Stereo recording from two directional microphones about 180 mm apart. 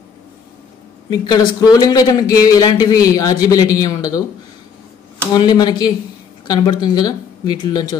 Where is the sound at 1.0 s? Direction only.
25° left (ahead or behind).